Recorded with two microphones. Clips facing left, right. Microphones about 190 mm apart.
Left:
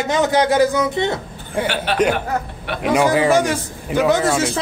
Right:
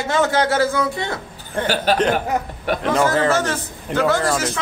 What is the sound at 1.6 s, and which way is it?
Speech, 10° left (ahead or behind).